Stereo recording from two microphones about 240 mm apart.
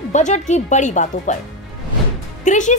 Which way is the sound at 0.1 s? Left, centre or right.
Left.